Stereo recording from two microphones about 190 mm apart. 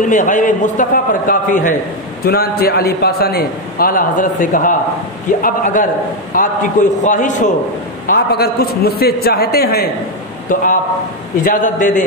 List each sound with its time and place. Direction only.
0.0 s a man's voice: 40° left (ahead or behind)
8.1 s a man's voice: 55° left (ahead or behind)
10.5 s a man's voice: 45° left (ahead or behind)